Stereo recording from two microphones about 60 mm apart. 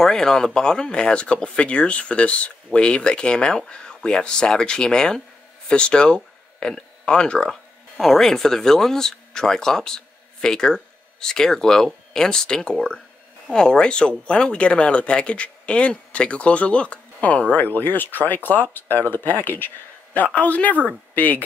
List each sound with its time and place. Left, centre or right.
0.0 s speech: centre; by 21.4 s left